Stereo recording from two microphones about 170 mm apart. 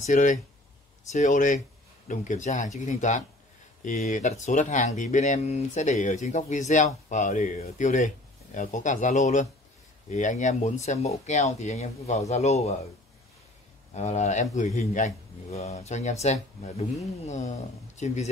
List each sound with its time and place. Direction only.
0.0 s speech: 50° left (ahead or behind)
13.9 s speech: 40° left (ahead or behind)